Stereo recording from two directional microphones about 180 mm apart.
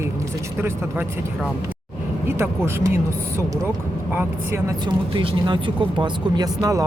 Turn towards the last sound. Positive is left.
turn(degrees=-20)  # may be behind; listen again after turning